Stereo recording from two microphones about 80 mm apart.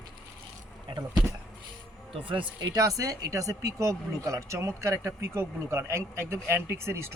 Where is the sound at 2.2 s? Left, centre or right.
Right.